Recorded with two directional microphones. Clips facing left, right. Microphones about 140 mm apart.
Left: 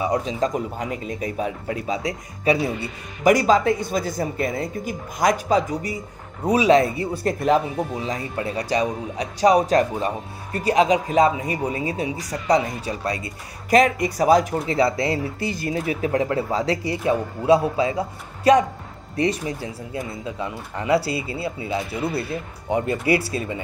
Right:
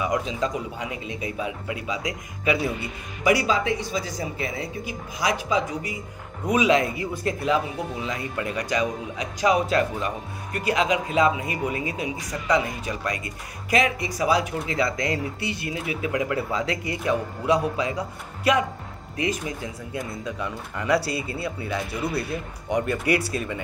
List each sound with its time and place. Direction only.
0.0 s a man's voice: 35° left (ahead or behind)
3.3 s a man's voice: 45° left (ahead or behind)
8.0 s a man's voice: 35° left (ahead or behind)